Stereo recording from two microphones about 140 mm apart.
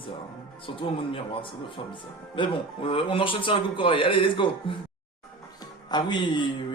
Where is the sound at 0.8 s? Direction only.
40° left (ahead or behind).